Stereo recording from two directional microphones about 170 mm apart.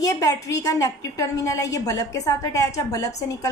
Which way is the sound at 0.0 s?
20° left (ahead or behind).